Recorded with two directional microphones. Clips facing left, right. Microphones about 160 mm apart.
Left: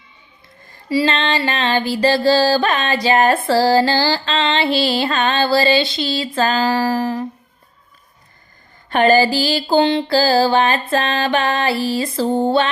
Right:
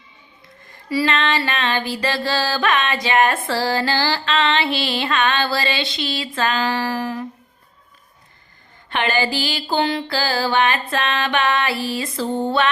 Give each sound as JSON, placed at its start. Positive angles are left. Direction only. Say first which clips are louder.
{"t": 0.7, "sound": "music", "louder": "left 3 dB", "side_deg": 30}
{"t": 8.9, "sound": "music", "louder": "left 8 dB", "side_deg": 40}